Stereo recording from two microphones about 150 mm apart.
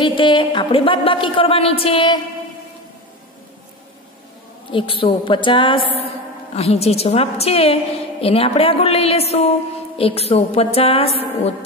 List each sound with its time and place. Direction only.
0.0 s a woman's voice: 30° left (ahead or behind)
4.6 s a woman's voice: 35° left (ahead or behind)